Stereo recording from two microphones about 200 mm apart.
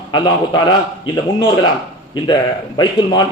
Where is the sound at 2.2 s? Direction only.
20° left (ahead or behind).